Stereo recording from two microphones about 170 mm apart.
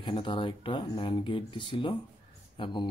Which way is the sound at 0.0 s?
30° left (ahead or behind).